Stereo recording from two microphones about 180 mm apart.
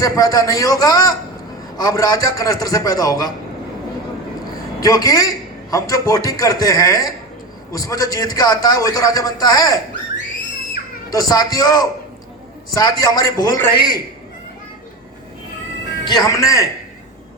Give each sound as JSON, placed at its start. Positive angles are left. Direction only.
{"t": 0.0, "sound": "a man's voice", "side_deg": 20}
{"t": 4.8, "sound": "a man's voice", "side_deg": 20}
{"t": 11.1, "sound": "a man's voice", "side_deg": 20}
{"t": 16.0, "sound": "a man's voice", "side_deg": 20}